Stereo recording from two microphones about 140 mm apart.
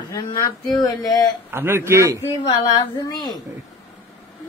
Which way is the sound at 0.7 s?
25° left (ahead or behind).